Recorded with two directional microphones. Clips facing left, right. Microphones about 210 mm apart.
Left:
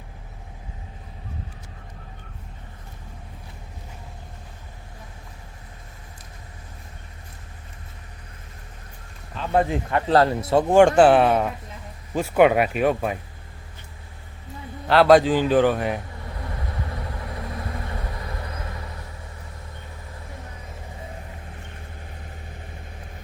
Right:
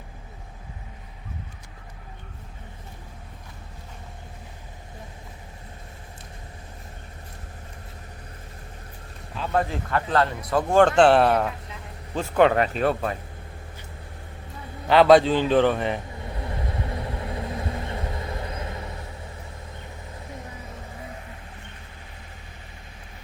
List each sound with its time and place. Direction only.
9.5 s speech: 20° left (ahead or behind)
10.1 s a man's voice: 35° left (ahead or behind); by 13.1 s 10° left (ahead or behind)
14.8 s a man's voice: centre (ahead or behind)
16.4 s vehicle: 25° right (ahead or behind)